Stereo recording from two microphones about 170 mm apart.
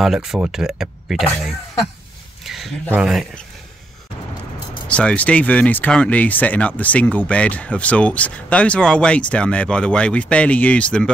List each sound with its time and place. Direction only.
0.0 s speech: centre (ahead or behind)
2.4 s speech: centre (ahead or behind)
4.8 s speech: 5° left (ahead or behind)